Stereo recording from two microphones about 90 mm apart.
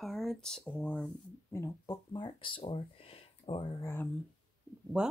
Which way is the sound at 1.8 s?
55° left (ahead or behind).